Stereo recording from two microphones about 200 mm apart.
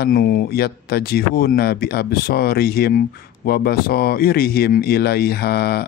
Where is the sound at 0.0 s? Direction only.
50° left (ahead or behind).